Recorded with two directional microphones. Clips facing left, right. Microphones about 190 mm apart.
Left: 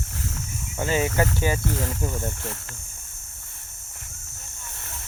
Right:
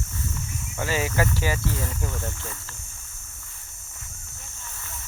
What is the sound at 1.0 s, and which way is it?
Speech, 30° left (ahead or behind).